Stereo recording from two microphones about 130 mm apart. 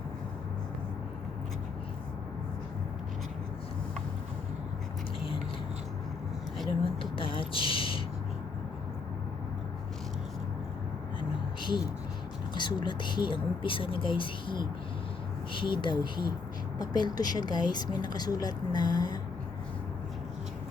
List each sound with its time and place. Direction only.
6.8 s a sound: 45° left (ahead or behind)
11.2 s vehicle: 35° left (ahead or behind)
12.5 s speech: 35° left (ahead or behind)